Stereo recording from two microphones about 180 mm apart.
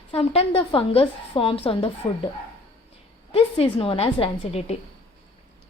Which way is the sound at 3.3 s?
30° left (ahead or behind).